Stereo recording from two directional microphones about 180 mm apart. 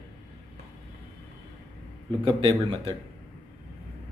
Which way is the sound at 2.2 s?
30° right (ahead or behind).